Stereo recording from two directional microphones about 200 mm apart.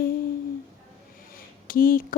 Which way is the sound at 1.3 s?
45° left (ahead or behind).